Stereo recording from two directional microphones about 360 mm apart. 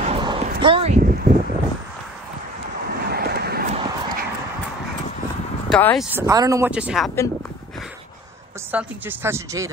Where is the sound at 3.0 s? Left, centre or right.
Right.